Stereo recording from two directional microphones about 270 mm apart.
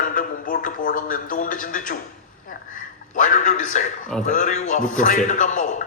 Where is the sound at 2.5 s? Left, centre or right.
Left.